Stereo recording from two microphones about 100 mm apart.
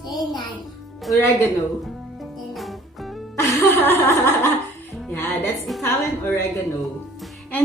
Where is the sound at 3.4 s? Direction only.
25° left (ahead or behind).